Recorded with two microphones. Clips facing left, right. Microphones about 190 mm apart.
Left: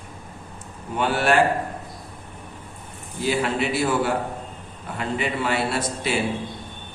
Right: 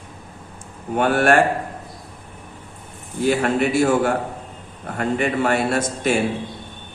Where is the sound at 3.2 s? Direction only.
50° right (ahead or behind).